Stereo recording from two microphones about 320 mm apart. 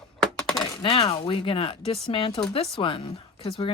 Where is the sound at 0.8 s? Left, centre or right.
Centre.